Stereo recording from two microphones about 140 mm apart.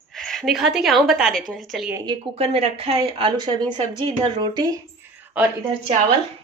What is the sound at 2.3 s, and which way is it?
A woman's voice, 45° right (ahead or behind).